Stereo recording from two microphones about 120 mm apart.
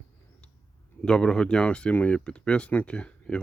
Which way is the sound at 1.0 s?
5° left (ahead or behind).